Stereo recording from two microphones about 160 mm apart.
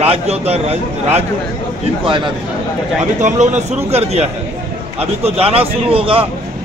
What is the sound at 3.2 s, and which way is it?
A man's voice, 45° right (ahead or behind).